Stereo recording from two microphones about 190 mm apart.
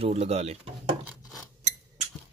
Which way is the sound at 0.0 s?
35° right (ahead or behind).